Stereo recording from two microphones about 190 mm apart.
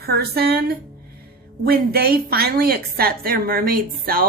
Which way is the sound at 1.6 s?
55° right (ahead or behind).